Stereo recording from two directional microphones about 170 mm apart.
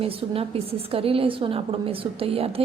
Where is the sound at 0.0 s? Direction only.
35° right (ahead or behind).